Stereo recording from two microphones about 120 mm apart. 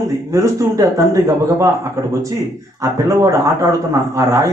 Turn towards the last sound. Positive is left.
turn(degrees=-25)  # may be behind; listen again after turning